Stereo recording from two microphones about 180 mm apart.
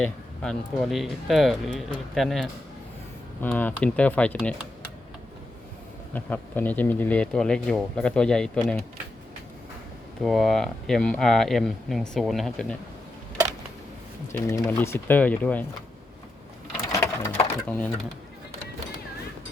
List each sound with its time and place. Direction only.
0.0 s speech: centre (ahead or behind)
6.1 s speech: 10° left (ahead or behind)
10.2 s speech: centre (ahead or behind)
14.3 s speech: 15° left (ahead or behind)
16.7 s sewing machine: 20° left (ahead or behind)
17.7 s speech: 10° left (ahead or behind)